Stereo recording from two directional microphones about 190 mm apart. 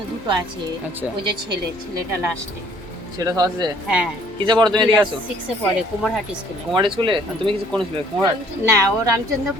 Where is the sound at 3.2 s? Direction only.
20° right (ahead or behind).